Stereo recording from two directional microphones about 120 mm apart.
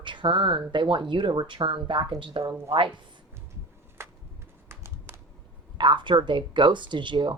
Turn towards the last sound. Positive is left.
turn(degrees=-40)  # may be behind; listen again after turning